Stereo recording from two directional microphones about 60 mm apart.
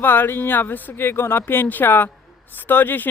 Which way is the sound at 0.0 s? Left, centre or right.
Left.